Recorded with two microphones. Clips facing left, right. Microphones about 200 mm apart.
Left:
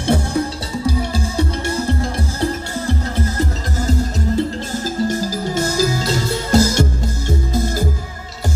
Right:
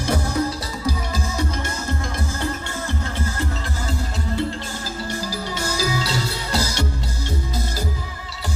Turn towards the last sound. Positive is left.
turn(degrees=50)  # may be behind; listen again after turning